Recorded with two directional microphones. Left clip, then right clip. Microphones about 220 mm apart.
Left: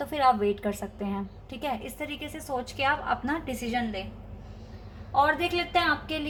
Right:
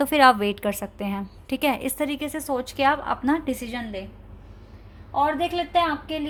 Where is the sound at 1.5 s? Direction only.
45° right (ahead or behind).